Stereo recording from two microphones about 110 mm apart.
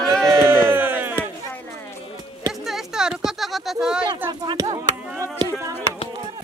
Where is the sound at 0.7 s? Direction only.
20° right (ahead or behind).